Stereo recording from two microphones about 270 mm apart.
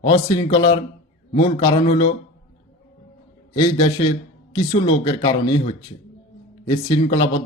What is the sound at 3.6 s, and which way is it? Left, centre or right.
A man's voice, centre.